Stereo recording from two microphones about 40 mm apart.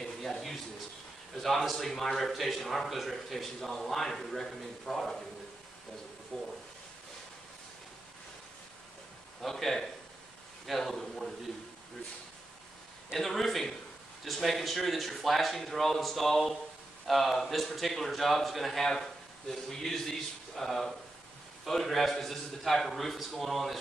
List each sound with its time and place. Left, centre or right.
0.0 s a sound: centre
1.4 s a man's voice: centre
6.3 s speech: centre
9.4 s a man's voice: centre
13.1 s a man's voice: centre